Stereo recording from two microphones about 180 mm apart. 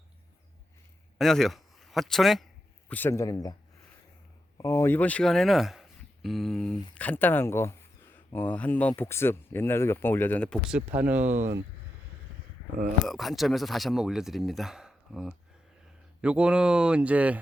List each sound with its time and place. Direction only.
1.2 s speech: centre (ahead or behind)
2.9 s speech: 10° left (ahead or behind)
4.5 s speech: 15° left (ahead or behind)
10.7 s speech: 10° right (ahead or behind)
13.1 s speech: centre (ahead or behind)